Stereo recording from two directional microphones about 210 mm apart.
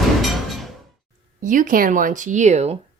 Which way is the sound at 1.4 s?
40° right (ahead or behind).